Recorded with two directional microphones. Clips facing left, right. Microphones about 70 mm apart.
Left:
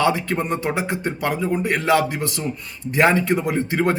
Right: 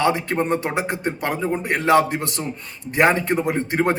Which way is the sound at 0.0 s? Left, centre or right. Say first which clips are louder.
Even; right.